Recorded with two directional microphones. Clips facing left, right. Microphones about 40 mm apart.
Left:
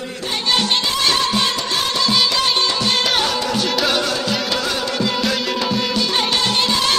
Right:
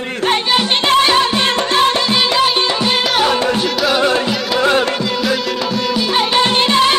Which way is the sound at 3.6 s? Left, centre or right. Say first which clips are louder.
Right 3 dB; centre.